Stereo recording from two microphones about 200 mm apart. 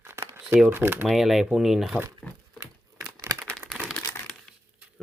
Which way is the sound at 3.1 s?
15° right (ahead or behind).